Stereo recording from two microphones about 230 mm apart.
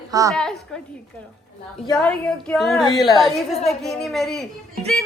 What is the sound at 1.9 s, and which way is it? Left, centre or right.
A man's voice, centre.